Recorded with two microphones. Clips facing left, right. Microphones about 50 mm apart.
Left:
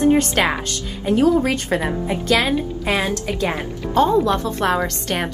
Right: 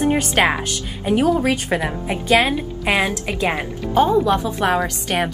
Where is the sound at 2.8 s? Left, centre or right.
Right.